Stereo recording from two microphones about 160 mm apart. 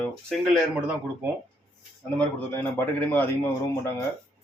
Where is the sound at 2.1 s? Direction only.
10° left (ahead or behind).